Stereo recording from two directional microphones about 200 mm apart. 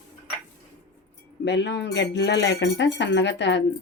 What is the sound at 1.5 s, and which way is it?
Speech, 60° left (ahead or behind).